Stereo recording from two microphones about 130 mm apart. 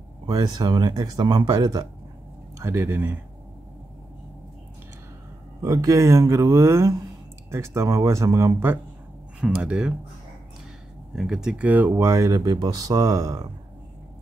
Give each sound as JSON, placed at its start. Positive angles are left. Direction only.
{"t": 0.3, "sound": "speech", "side_deg": -30}
{"t": 2.6, "sound": "speech", "side_deg": -20}
{"t": 5.6, "sound": "speech", "side_deg": -25}
{"t": 9.4, "sound": "speech", "side_deg": -5}
{"t": 11.1, "sound": "speech", "side_deg": -5}